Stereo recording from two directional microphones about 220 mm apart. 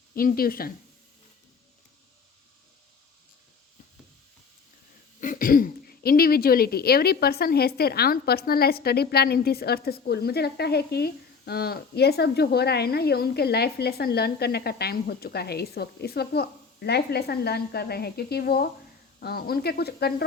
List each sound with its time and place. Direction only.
0.2 s speech: 40° left (ahead or behind)
5.2 s speech: 40° left (ahead or behind)